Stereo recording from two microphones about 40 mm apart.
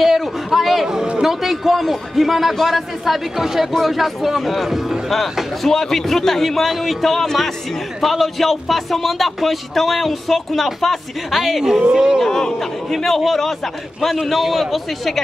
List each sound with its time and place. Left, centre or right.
0.0 s a sound: centre
0.8 s a sound: centre
1.2 s speech: centre
5.7 s speech: centre
11.9 s speech: right
12.3 s speech: centre